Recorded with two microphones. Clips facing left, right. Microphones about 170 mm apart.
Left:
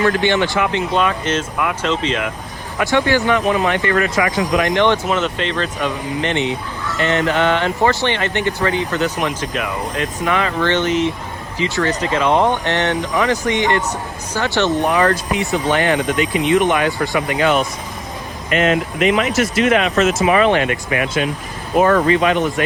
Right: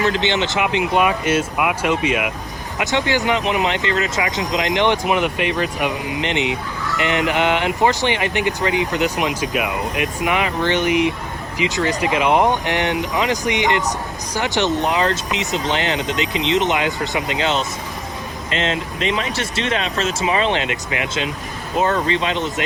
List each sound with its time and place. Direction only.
0.0 s speech: 20° right (ahead or behind)